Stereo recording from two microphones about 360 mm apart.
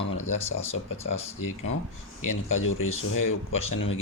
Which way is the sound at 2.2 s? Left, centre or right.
Left.